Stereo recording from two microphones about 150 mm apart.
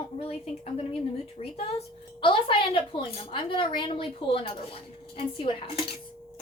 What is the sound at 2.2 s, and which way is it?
A woman's voice, 35° left (ahead or behind).